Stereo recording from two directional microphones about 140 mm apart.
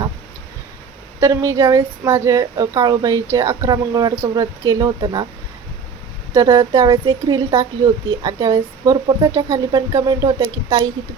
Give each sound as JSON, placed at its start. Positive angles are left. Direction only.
{"t": 1.2, "sound": "a woman's voice", "side_deg": -20}
{"t": 6.3, "sound": "a woman's voice", "side_deg": -25}